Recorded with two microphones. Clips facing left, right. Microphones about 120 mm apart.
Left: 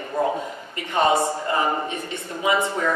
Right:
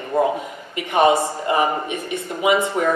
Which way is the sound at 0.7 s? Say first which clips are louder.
Right 4 dB; 20° right (ahead or behind).